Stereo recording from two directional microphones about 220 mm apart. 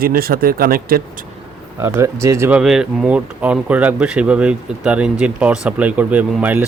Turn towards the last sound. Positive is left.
turn(degrees=-5)  # may be behind; listen again after turning